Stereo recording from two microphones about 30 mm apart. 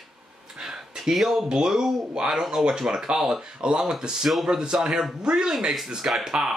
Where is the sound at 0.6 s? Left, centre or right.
Centre.